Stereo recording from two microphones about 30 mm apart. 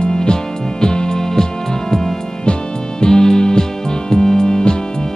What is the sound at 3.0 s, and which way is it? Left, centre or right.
Music, left.